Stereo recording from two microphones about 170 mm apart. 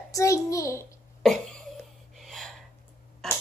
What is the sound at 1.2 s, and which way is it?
Cough, 5° left (ahead or behind).